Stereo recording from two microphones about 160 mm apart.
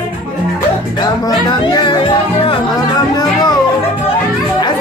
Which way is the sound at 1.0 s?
25° left (ahead or behind).